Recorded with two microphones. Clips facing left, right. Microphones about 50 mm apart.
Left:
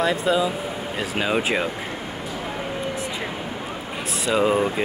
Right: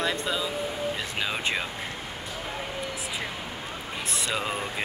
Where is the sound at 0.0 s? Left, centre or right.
Centre.